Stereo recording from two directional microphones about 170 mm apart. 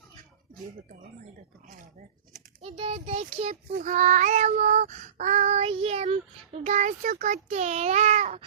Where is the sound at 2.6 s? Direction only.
35° right (ahead or behind).